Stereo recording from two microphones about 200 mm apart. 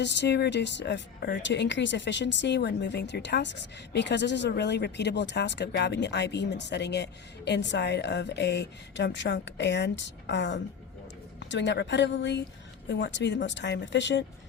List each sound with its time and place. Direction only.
0.0 s a woman's voice: 60° left (ahead or behind)